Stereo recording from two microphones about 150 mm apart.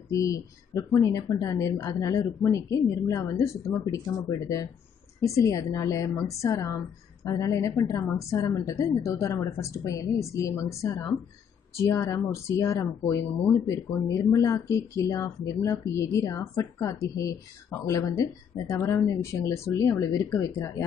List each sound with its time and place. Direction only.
0.1 s speech: 20° left (ahead or behind)